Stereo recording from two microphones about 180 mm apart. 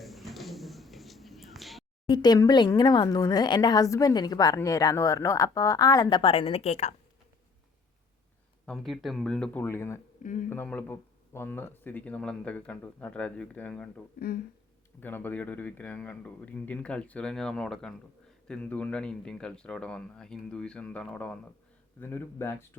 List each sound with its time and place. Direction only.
0.0 s a sound: centre (ahead or behind)
2.0 s speech: 25° left (ahead or behind)
8.6 s a man's voice: centre (ahead or behind)
14.2 s speech: 60° left (ahead or behind)
15.0 s a man's voice: 10° left (ahead or behind)